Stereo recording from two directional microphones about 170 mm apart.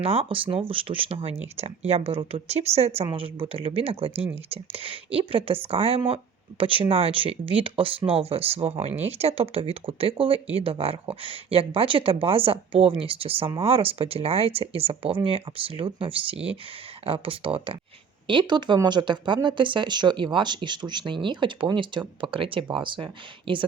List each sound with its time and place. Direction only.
0.0 s speech: 35° right (ahead or behind)